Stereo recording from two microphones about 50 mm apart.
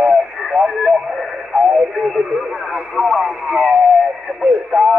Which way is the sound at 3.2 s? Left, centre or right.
Centre.